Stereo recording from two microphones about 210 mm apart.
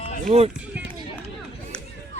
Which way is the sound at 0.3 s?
30° right (ahead or behind).